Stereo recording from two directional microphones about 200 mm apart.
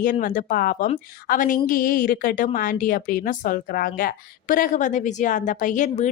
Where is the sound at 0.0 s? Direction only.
45° left (ahead or behind).